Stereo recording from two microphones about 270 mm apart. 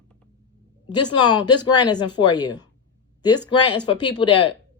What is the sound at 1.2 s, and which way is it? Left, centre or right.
A woman's voice, centre.